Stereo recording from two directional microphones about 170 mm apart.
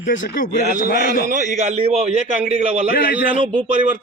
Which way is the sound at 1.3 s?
50° right (ahead or behind).